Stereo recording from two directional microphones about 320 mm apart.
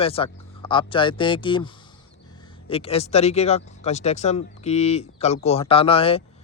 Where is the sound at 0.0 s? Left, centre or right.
Centre.